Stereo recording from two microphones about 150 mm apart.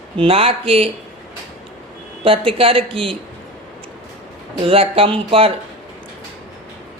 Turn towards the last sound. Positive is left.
turn(degrees=-35)  # may be behind; listen again after turning